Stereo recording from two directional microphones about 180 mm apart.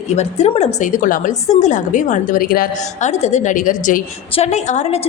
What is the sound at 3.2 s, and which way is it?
A woman's voice, 45° left (ahead or behind).